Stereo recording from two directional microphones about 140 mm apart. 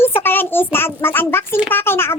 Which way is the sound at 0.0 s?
15° left (ahead or behind).